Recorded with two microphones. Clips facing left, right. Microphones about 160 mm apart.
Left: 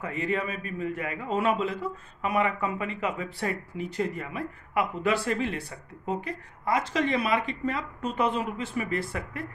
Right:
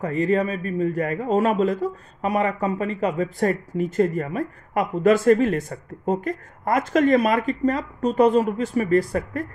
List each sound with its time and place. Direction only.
0.0 s a man's voice: 40° right (ahead or behind)